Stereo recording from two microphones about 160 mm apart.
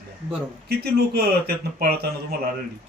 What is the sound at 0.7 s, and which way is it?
Speech, 80° right.